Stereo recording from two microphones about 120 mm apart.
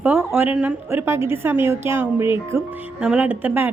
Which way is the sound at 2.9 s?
10° right (ahead or behind).